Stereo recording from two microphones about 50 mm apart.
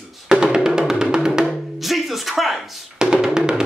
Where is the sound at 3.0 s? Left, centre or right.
Centre.